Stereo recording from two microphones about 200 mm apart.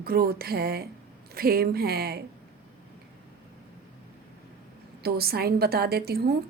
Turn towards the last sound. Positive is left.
turn(degrees=-50)  # may be behind; listen again after turning